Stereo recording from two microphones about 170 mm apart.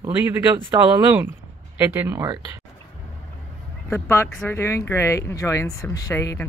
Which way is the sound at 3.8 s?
15° left (ahead or behind).